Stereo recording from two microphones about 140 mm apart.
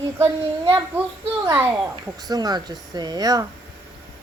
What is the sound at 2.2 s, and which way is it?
Speech, 30° right (ahead or behind).